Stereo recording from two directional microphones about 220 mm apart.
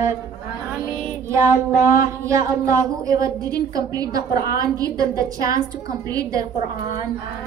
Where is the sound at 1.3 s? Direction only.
10° right (ahead or behind).